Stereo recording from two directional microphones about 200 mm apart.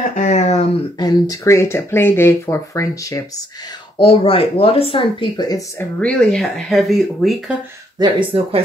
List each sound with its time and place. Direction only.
0.1 s a sound: 35° left (ahead or behind)
0.9 s speech: 20° left (ahead or behind)
4.0 s speech: 25° left (ahead or behind)
5.9 s speech: 5° left (ahead or behind)
8.0 s speech: 25° right (ahead or behind)